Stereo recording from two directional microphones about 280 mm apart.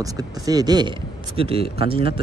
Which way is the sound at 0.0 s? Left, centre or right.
Centre.